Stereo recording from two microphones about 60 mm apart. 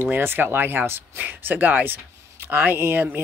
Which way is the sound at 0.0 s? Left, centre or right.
Right.